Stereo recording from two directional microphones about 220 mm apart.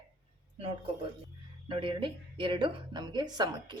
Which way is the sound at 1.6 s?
20° right (ahead or behind).